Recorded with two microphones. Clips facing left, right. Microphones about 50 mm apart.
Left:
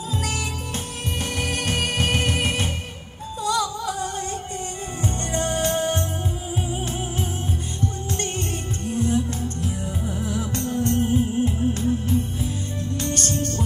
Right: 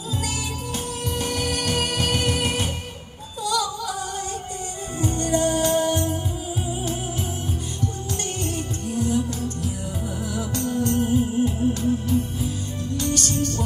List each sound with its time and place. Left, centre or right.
1.1 s music: left
8.9 s music: left